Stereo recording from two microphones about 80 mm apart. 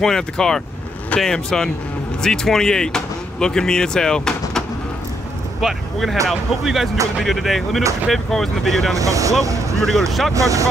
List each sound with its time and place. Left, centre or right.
0.0 s speech: centre
8.9 s speech: right
9.4 s vehicle: right
9.9 s speech: centre
10.3 s speech: right